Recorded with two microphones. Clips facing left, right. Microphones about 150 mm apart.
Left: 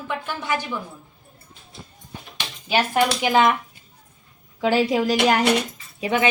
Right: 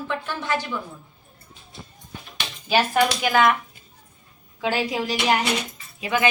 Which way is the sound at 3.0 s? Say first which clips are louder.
Left 1 dB; 25° left (ahead or behind).